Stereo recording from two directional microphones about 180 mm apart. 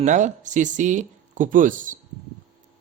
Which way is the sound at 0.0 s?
45° right (ahead or behind).